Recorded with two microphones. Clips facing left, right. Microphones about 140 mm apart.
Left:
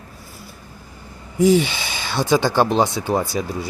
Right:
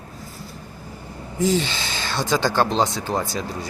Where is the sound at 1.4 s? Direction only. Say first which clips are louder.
Left 6 dB; 15° left (ahead or behind).